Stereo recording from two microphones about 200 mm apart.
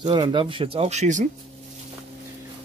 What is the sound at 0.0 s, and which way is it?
Speech, 20° right (ahead or behind).